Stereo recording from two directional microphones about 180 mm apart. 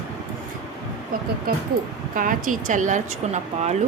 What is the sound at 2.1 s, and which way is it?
Speech, 50° right (ahead or behind).